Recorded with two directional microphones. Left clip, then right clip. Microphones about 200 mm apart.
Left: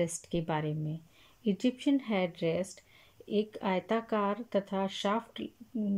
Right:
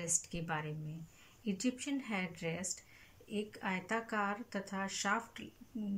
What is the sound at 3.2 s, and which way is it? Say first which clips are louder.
Speech: left 8 dB; 45° left (ahead or behind).